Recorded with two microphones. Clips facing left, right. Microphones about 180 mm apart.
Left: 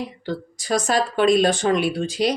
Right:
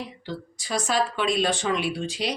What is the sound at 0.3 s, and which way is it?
Speech, 45° left (ahead or behind).